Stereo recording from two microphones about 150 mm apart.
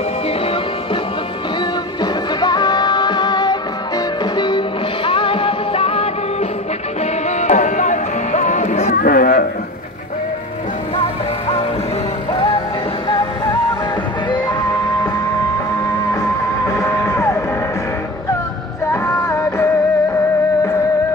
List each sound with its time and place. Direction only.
2.0 s music: 30° left (ahead or behind)
7.2 s music: 50° left (ahead or behind)
8.9 s a sound: 80° left
16.1 s music: 20° left (ahead or behind)
18.9 s music: 20° left (ahead or behind)